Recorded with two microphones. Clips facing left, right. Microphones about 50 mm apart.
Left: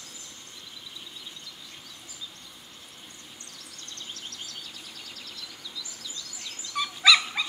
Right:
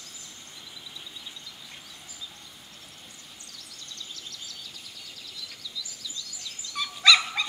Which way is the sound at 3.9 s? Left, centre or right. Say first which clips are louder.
Left 2 dB; left.